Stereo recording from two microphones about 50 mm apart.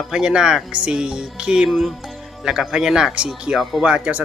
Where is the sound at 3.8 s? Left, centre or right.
Right.